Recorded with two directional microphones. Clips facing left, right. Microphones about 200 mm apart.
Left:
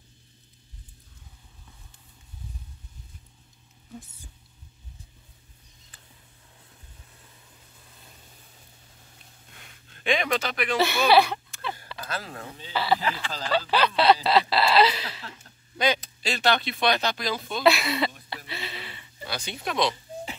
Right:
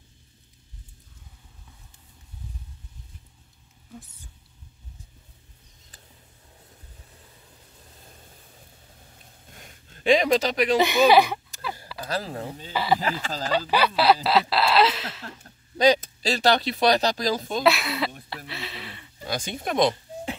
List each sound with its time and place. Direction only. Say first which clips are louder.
9.5 s a sound: right 5 dB; 40° right (ahead or behind)
10.8 s speech: right 2 dB; 15° right (ahead or behind)
12.0 s speech: right 9 dB; 30° right (ahead or behind)
12.7 s speech: right 1 dB; 15° right (ahead or behind)
13.0 s speech: right 2 dB; 45° right (ahead or behind)
13.5 s a sound: right 1 dB; 10° right (ahead or behind)
15.2 s speech: right 3 dB; 40° right (ahead or behind)
17.6 s a sound: left 2 dB; centre (ahead or behind)
19.2 s speech: right 3 dB; 45° right (ahead or behind)